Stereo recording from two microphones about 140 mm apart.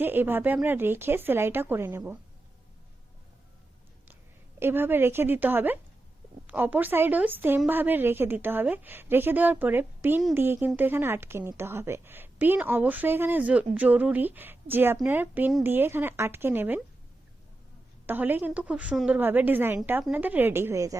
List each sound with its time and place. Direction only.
0.0 s a woman's voice: 15° right (ahead or behind)
4.6 s a woman's voice: 15° right (ahead or behind)
18.0 s a woman's voice: 15° right (ahead or behind)